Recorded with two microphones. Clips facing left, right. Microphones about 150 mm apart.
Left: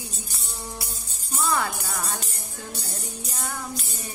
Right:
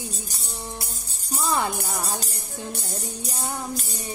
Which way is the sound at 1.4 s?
20° right (ahead or behind).